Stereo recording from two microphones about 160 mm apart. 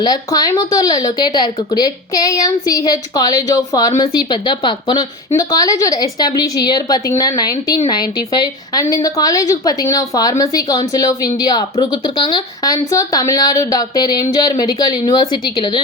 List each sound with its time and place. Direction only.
0.0 s a woman's voice: 25° left (ahead or behind)